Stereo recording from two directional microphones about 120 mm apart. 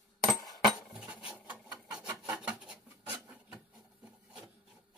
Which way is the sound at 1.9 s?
10° right (ahead or behind).